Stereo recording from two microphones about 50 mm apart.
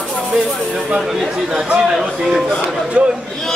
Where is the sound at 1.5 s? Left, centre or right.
Centre.